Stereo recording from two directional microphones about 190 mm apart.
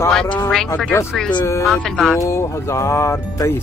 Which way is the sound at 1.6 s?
Centre (ahead or behind).